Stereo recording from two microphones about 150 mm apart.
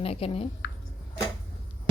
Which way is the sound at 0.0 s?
40° left (ahead or behind).